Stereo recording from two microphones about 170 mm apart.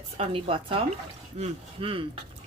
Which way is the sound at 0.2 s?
35° right (ahead or behind).